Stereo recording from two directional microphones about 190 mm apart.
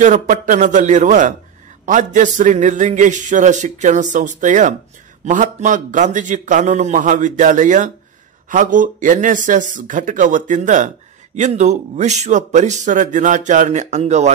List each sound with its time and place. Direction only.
0.0 s speech: 40° right (ahead or behind)